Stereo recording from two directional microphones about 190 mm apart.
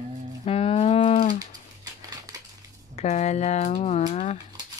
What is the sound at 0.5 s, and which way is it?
Cattle, 30° left (ahead or behind).